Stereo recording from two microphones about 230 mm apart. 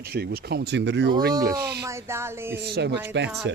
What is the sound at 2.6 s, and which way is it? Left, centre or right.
Speech, right.